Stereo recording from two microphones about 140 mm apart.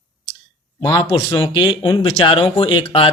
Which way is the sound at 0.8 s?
30° left (ahead or behind).